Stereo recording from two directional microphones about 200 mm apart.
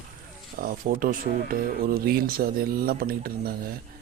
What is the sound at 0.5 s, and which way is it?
Speech, 45° right (ahead or behind).